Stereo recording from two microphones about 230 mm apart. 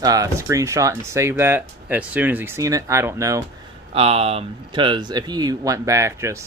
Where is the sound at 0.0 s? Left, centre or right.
Centre.